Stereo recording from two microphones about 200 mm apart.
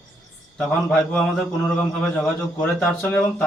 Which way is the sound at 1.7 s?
5° left (ahead or behind).